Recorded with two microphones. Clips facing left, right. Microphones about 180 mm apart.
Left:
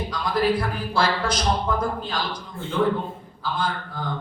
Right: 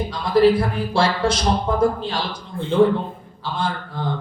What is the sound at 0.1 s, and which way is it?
Speech, 30° right (ahead or behind).